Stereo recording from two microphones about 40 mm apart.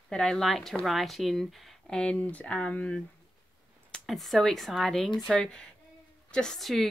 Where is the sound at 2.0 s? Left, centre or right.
Left.